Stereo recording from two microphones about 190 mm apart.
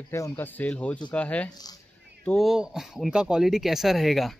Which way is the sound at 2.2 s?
Centre (ahead or behind).